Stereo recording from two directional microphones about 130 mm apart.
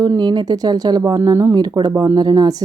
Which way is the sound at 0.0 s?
30° right (ahead or behind).